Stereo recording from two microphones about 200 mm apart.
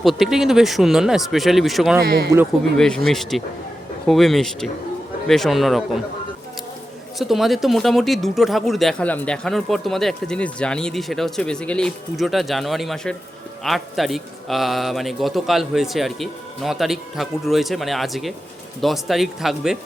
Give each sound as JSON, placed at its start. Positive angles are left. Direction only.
{"t": 0.0, "sound": "speech", "side_deg": 0}
{"t": 2.0, "sound": "speech", "side_deg": -50}
{"t": 2.7, "sound": "speech", "side_deg": 5}
{"t": 7.2, "sound": "speech", "side_deg": 0}